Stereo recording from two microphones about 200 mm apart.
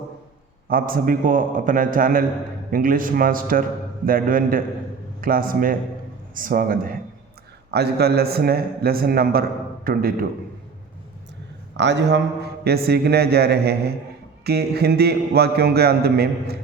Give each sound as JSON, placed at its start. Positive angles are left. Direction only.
{"t": 0.7, "sound": "a man's voice", "side_deg": -45}
{"t": 11.8, "sound": "a man's voice", "side_deg": -60}